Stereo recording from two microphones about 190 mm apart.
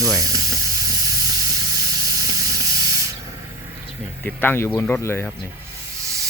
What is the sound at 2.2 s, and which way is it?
Steam, 20° right (ahead or behind).